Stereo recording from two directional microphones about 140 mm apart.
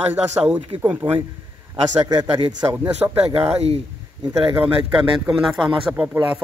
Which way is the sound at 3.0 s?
15° right (ahead or behind).